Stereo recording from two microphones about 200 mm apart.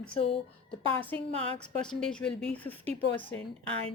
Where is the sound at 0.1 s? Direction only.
30° left (ahead or behind).